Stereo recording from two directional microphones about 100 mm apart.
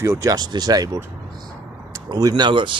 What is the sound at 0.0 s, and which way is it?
Speech, 30° right (ahead or behind).